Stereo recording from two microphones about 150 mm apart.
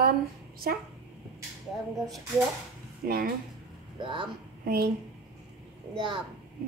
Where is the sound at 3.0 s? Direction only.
75° right (ahead or behind).